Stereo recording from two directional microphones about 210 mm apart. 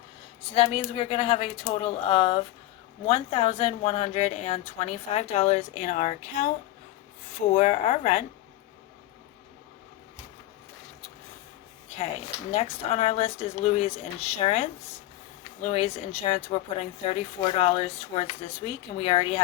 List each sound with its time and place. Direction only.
0.5 s a woman's voice: 25° left (ahead or behind)
12.5 s speech: 30° left (ahead or behind)